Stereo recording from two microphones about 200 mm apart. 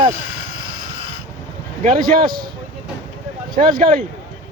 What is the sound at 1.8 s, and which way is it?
Speech, 40° right (ahead or behind).